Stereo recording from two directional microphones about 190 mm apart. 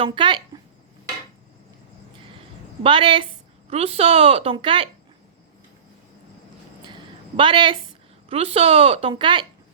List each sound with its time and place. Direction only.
0.0 s speech: 25° right (ahead or behind)
2.8 s speech: 25° right (ahead or behind)
6.8 s a sound: 25° right (ahead or behind)
8.3 s speech: 30° right (ahead or behind)